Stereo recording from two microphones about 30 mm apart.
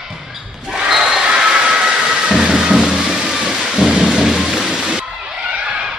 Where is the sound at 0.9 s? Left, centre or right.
Centre.